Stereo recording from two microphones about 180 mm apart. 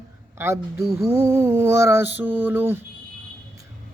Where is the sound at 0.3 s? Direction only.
15° right (ahead or behind).